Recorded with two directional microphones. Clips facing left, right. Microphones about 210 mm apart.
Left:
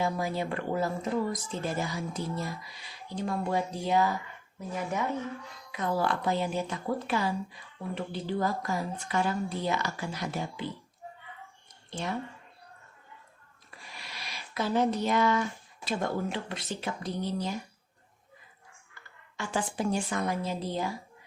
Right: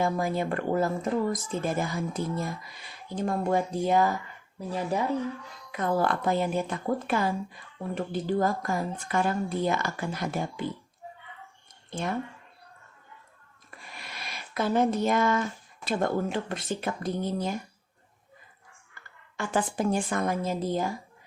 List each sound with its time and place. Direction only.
0.0 s a woman's voice: 50° right (ahead or behind)
4.7 s speech: 35° right (ahead or behind)
5.7 s a woman's voice: 50° right (ahead or behind)
11.9 s speech: 50° right (ahead or behind)
13.7 s a sound: 50° right (ahead or behind)
15.8 s a woman's voice: 50° right (ahead or behind)
19.4 s a woman's voice: 55° right (ahead or behind)